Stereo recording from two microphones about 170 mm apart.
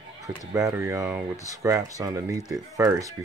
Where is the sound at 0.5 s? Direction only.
15° right (ahead or behind).